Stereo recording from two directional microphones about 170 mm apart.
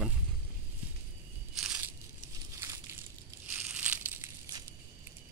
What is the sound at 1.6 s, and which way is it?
Crushing, 5° right (ahead or behind).